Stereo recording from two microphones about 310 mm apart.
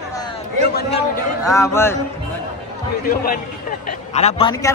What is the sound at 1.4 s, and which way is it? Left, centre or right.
Speech, centre.